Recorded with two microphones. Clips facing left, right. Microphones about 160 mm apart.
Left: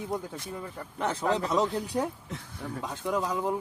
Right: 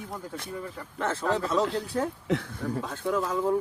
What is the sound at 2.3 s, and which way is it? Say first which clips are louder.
Speech: right 13 dB; 75° right (ahead or behind).